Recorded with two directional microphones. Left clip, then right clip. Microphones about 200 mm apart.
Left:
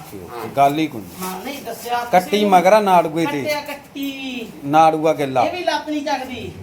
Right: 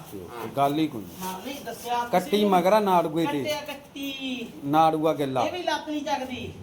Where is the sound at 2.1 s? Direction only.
Centre (ahead or behind).